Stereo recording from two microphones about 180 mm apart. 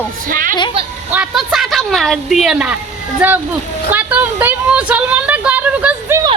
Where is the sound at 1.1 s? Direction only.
5° right (ahead or behind).